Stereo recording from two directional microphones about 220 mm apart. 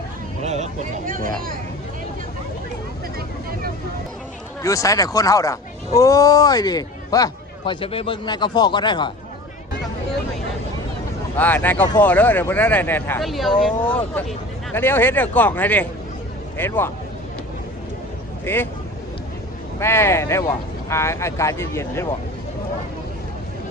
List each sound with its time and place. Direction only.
0.4 s speech: 30° right (ahead or behind)
4.6 s speech: 15° left (ahead or behind)
11.3 s speech: 10° left (ahead or behind)
18.4 s speech: 10° left (ahead or behind)
19.8 s speech: 10° left (ahead or behind)